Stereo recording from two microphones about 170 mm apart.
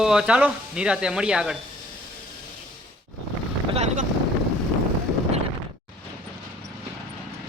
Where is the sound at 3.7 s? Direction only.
40° right (ahead or behind).